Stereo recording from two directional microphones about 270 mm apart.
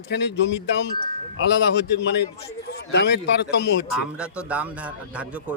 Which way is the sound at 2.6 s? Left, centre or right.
Left.